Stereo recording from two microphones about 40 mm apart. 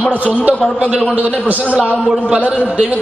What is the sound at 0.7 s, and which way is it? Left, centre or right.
Speech, right.